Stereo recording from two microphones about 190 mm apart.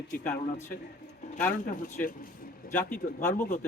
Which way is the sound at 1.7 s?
45° left (ahead or behind).